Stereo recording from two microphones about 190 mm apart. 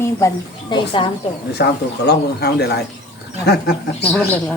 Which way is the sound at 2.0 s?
60° left (ahead or behind).